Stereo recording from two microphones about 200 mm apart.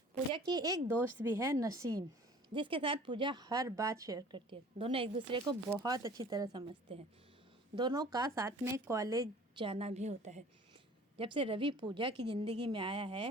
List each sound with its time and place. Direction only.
0.1 s a woman's voice: 20° right (ahead or behind)
7.8 s a woman's voice: 20° right (ahead or behind)